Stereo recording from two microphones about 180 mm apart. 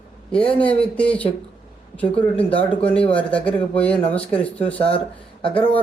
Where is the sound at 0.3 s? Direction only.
5° left (ahead or behind).